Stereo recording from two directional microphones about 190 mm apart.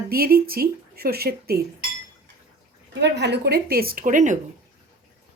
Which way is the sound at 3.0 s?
65° right (ahead or behind).